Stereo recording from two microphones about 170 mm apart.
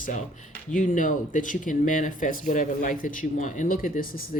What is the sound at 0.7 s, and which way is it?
Speech, 50° left (ahead or behind).